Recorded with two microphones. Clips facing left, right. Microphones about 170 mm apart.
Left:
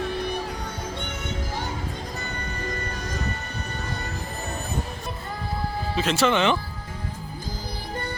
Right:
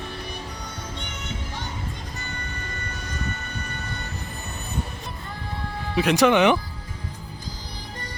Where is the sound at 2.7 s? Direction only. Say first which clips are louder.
Left 4 dB; 40° left (ahead or behind).